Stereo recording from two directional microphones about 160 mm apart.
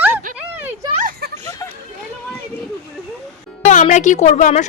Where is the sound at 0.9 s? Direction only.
60° right (ahead or behind).